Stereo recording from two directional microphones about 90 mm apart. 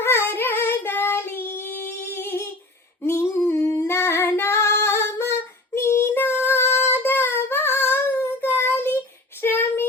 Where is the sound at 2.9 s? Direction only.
30° left (ahead or behind).